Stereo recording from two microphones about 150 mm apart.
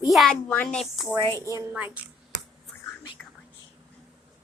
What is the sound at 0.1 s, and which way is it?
Speech, centre (ahead or behind).